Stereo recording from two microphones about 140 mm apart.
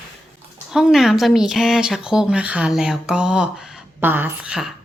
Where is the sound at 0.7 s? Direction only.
5° right (ahead or behind).